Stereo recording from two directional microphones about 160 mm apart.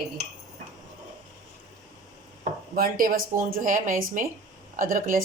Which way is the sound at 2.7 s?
65° right (ahead or behind).